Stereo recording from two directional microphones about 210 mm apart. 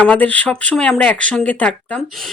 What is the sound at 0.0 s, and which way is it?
Speech, 5° left (ahead or behind).